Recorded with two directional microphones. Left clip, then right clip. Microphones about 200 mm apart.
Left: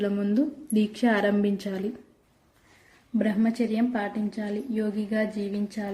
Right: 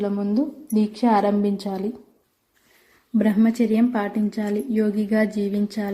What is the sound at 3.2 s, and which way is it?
A woman's voice, 20° right (ahead or behind).